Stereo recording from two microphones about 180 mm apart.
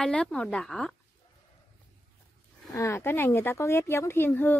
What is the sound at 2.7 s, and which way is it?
Speech, 15° left (ahead or behind).